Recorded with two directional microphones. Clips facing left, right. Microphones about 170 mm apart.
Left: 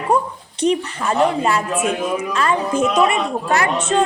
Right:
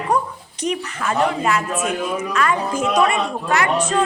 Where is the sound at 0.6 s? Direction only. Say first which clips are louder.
Left 5 dB; 30° left (ahead or behind).